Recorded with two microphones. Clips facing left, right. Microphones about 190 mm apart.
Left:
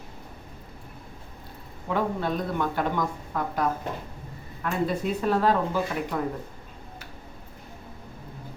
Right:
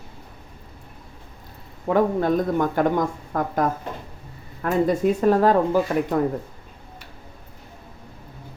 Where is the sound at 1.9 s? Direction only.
45° right (ahead or behind).